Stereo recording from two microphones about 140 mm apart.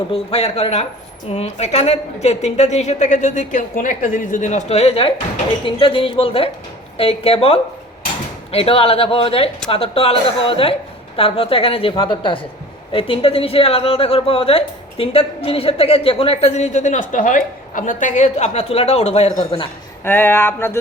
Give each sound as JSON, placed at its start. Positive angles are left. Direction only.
{"t": 0.1, "sound": "a woman's voice", "side_deg": 45}
{"t": 19.4, "sound": "a woman's voice", "side_deg": 35}
{"t": 20.1, "sound": "speech", "side_deg": 15}